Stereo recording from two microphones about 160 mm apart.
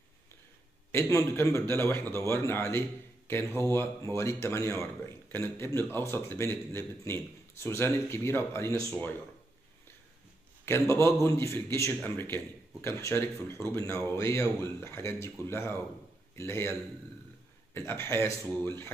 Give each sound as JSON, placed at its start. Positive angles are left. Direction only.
{"t": 0.9, "sound": "speech", "side_deg": 15}
{"t": 10.6, "sound": "a man's voice", "side_deg": 15}
{"t": 17.7, "sound": "speech", "side_deg": 15}